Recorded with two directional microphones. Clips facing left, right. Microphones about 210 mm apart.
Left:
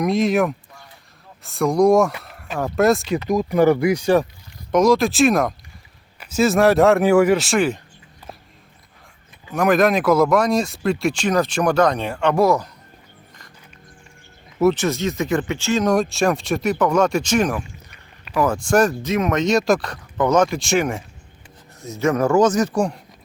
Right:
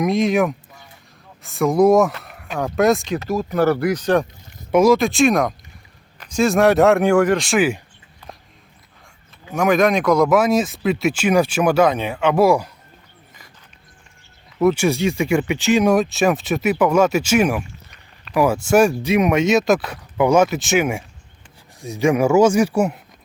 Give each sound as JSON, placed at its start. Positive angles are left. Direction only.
{"t": 0.0, "sound": "speech", "side_deg": 0}
{"t": 3.2, "sound": "speech", "side_deg": 15}
{"t": 4.7, "sound": "speech", "side_deg": -5}
{"t": 9.5, "sound": "speech", "side_deg": 0}
{"t": 14.6, "sound": "speech", "side_deg": -5}